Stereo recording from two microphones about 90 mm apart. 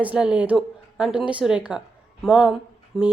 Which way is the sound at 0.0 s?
15° right (ahead or behind).